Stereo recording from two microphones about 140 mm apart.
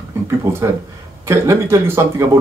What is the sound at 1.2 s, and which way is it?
Speech, 20° right (ahead or behind).